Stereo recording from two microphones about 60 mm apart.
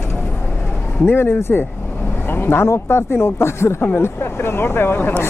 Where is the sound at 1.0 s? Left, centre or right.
Left.